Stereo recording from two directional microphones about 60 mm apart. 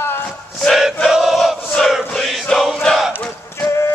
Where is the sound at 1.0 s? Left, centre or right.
Centre.